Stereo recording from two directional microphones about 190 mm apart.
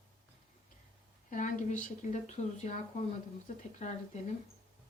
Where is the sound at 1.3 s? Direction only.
40° left (ahead or behind).